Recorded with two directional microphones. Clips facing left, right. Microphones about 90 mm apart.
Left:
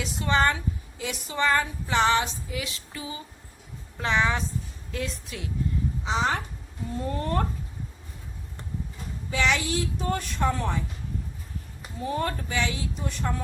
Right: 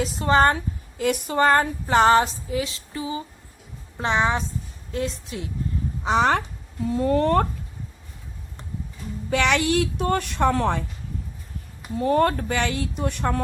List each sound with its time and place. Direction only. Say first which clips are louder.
0.0 s speech: right 5 dB; 40° right (ahead or behind)
6.1 s a woman's voice: right 7 dB; 60° right (ahead or behind)
7.0 s speech: right 9 dB; 80° right
9.3 s a woman's voice: right 5 dB; 65° right (ahead or behind)
11.9 s a woman's voice: right 9 dB; 60° right (ahead or behind)